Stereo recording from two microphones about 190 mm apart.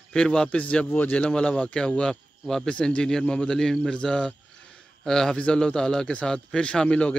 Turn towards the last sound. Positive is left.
turn(degrees=5)  # may be behind; listen again after turning